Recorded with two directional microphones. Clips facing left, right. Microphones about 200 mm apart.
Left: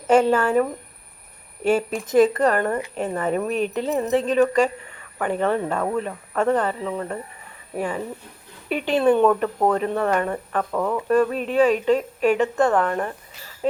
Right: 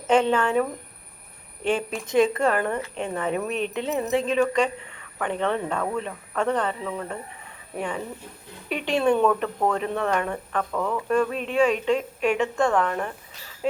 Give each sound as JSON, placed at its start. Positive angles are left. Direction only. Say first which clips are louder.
{"t": 0.1, "sound": "speech", "louder": "left 3 dB", "side_deg": 5}
{"t": 3.8, "sound": "speech", "louder": "left 3 dB", "side_deg": 30}
{"t": 4.1, "sound": "speech", "louder": "left 4 dB", "side_deg": 0}
{"t": 10.7, "sound": "speech", "louder": "left 4 dB", "side_deg": 15}